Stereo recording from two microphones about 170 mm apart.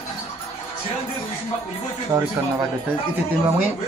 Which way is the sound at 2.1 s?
15° right (ahead or behind).